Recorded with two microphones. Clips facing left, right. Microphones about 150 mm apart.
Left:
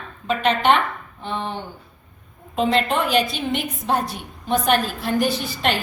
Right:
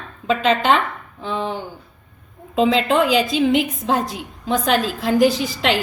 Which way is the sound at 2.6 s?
90° right.